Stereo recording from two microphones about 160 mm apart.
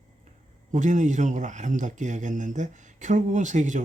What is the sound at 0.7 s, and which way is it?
Speech, 50° right (ahead or behind).